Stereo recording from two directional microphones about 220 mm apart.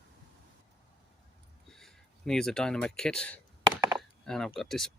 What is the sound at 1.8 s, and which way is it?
Speech, 5° left (ahead or behind).